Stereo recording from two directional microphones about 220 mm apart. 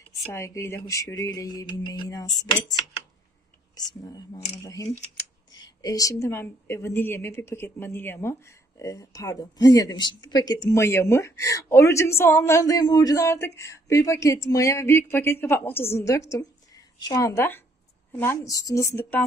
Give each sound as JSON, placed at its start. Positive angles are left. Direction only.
{"t": 0.3, "sound": "a woman's voice", "side_deg": 10}